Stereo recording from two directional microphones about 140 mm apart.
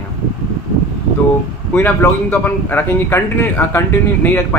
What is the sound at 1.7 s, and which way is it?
A man's voice, 15° left (ahead or behind).